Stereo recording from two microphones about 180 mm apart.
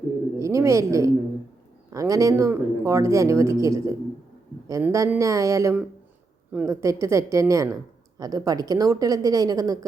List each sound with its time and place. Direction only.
0.3 s a woman's voice: 15° right (ahead or behind)